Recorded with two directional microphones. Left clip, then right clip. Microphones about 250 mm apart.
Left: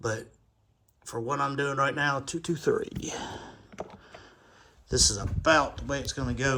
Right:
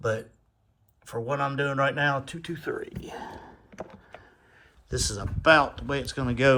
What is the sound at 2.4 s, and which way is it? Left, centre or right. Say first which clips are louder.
Speech: left 6 dB; left.